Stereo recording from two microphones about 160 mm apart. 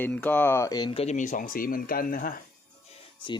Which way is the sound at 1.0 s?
50° left (ahead or behind).